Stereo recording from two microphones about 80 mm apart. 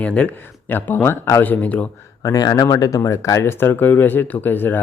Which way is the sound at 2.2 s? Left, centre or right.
Left.